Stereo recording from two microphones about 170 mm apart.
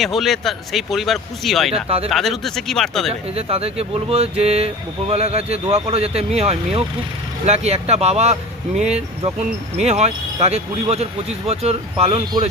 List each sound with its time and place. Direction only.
0.0 s speech: centre (ahead or behind)
1.7 s speech: 35° right (ahead or behind)
2.0 s speech: centre (ahead or behind)
3.1 s speech: 35° right (ahead or behind)